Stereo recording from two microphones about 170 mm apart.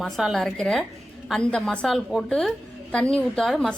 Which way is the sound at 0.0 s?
Centre (ahead or behind).